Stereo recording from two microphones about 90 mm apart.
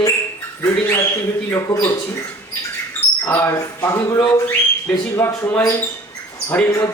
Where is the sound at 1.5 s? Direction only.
35° left (ahead or behind).